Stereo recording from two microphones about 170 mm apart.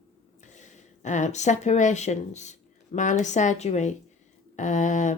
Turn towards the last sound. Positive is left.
turn(degrees=45)  # may be behind; listen again after turning